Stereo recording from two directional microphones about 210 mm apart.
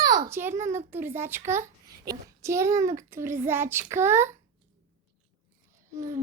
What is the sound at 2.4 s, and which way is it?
A child's voice, 15° right (ahead or behind).